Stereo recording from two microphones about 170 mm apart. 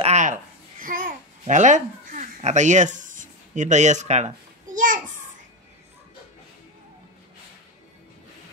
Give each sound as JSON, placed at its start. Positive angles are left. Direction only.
{"t": 0.0, "sound": "babbling", "side_deg": -45}
{"t": 1.4, "sound": "speech", "side_deg": -45}
{"t": 4.7, "sound": "a sound", "side_deg": -50}